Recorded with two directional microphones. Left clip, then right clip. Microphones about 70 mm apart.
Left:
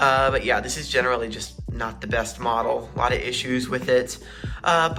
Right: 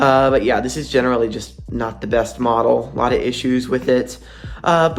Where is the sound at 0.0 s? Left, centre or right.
Right.